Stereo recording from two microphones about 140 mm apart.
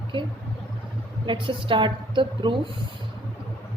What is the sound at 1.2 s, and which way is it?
A woman's voice, 35° right (ahead or behind).